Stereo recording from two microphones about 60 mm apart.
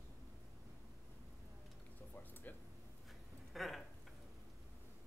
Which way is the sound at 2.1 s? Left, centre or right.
Left.